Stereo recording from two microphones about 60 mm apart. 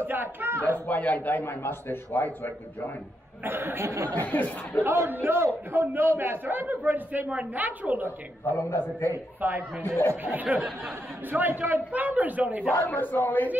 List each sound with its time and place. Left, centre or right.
0.0 s a sound: right
0.7 s a man's voice: left
3.4 s a man's voice: right
4.1 s a man's voice: left
4.8 s a man's voice: right
8.5 s a man's voice: left
9.4 s a man's voice: right
12.7 s a man's voice: left